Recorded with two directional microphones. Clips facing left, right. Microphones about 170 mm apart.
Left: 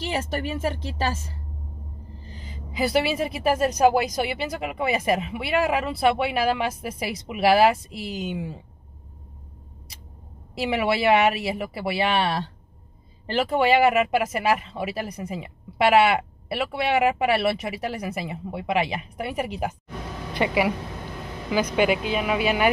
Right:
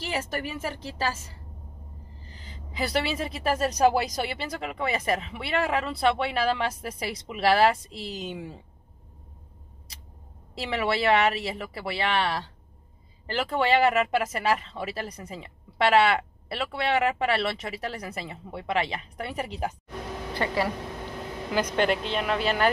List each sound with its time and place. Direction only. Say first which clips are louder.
0.0 s speech: left 3 dB; 25° left (ahead or behind)
2.2 s vehicle: left 6 dB; 15° left (ahead or behind)
4.1 s speech: left 4 dB; 10° left (ahead or behind)
10.5 s speech: left 4 dB; 10° left (ahead or behind)